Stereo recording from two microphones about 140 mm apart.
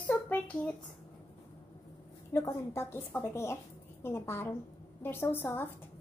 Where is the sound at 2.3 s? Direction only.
20° left (ahead or behind).